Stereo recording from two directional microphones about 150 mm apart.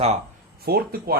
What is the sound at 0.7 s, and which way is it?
Speech, 90° right.